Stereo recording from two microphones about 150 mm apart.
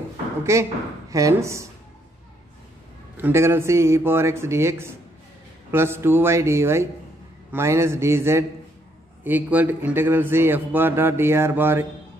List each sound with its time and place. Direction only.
0.4 s speech: 20° right (ahead or behind)
3.2 s a man's voice: 15° right (ahead or behind)